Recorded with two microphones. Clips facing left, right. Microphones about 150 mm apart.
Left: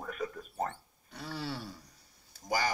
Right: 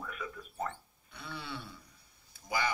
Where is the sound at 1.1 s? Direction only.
40° left (ahead or behind).